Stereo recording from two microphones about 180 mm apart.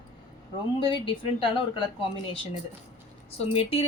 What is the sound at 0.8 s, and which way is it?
A woman's voice, 30° left (ahead or behind).